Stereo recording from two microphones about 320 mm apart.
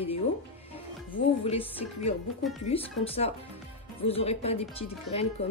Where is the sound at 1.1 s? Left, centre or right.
Centre.